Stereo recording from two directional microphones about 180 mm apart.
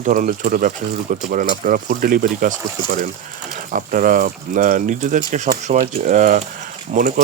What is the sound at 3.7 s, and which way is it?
Speech, 50° right (ahead or behind).